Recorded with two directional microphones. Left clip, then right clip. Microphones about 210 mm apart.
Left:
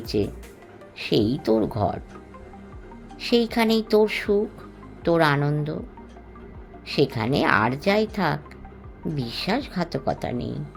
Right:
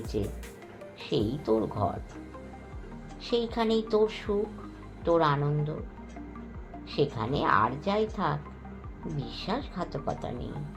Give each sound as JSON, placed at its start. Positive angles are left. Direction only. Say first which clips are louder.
{"t": 0.1, "sound": "speech", "louder": "left 8 dB", "side_deg": 50}
{"t": 3.2, "sound": "speech", "louder": "left 7 dB", "side_deg": 55}
{"t": 6.8, "sound": "speech", "louder": "left 6 dB", "side_deg": 55}